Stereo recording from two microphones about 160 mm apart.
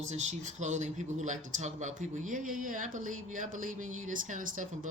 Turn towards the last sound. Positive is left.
turn(degrees=-55)  # may be behind; listen again after turning